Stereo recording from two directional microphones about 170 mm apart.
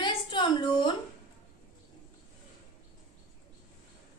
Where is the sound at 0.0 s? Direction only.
30° left (ahead or behind).